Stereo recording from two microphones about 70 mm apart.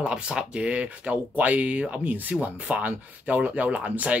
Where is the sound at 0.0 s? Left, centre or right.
Centre.